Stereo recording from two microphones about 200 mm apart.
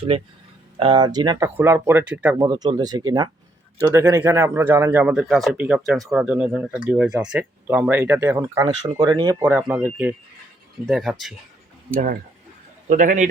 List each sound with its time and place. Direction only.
0.8 s speech: 25° right (ahead or behind)
2.5 s speech: 20° right (ahead or behind); by 11.3 s centre (ahead or behind)
12.9 s a man's voice: 40° right (ahead or behind)